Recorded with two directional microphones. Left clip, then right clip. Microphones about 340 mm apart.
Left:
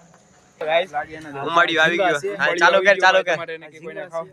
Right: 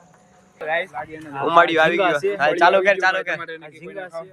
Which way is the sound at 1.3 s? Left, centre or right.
Centre.